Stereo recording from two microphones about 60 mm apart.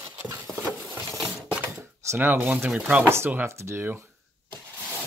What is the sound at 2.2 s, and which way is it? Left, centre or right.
Speech, right.